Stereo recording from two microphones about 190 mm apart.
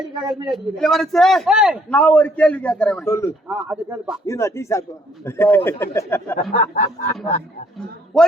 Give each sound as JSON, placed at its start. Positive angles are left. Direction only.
{"t": 0.3, "sound": "a man's voice", "side_deg": -20}
{"t": 0.5, "sound": "a man's voice", "side_deg": 0}
{"t": 1.9, "sound": "a man's voice", "side_deg": 5}
{"t": 3.1, "sound": "a man's voice", "side_deg": 15}
{"t": 3.5, "sound": "speech", "side_deg": -10}
{"t": 4.3, "sound": "a man's voice", "side_deg": 15}
{"t": 6.3, "sound": "a sound", "side_deg": 40}